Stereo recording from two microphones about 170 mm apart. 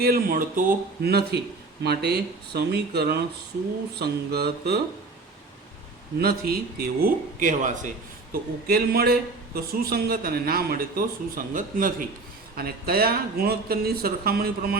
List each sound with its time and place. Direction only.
0.0 s a man's voice: 60° right (ahead or behind)
1.0 s speech: 70° right (ahead or behind)
6.1 s a man's voice: 65° right (ahead or behind); by 7.9 s 45° right (ahead or behind)
8.3 s a man's voice: 65° right (ahead or behind)
12.5 s a man's voice: 65° right (ahead or behind)